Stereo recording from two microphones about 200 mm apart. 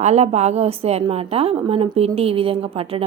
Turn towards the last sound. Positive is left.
turn(degrees=-30)  # may be behind; listen again after turning